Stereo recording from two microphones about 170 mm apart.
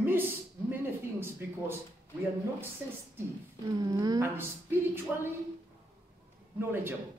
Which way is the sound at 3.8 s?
20° right (ahead or behind).